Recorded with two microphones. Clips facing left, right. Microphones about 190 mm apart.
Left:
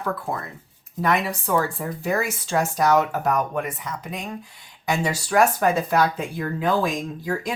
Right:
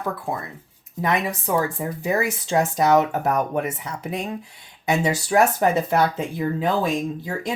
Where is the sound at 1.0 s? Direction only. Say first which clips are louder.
Even; 20° right (ahead or behind).